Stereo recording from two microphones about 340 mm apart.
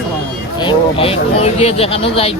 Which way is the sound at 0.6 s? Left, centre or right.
Centre.